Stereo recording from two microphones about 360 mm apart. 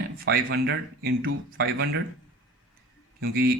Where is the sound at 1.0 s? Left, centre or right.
Right.